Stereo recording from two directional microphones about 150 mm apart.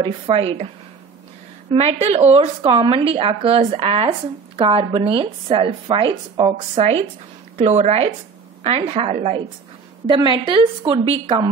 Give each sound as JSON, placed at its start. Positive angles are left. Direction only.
{"t": 0.0, "sound": "speech", "side_deg": -40}
{"t": 1.7, "sound": "a woman's voice", "side_deg": -45}
{"t": 10.0, "sound": "speech", "side_deg": -30}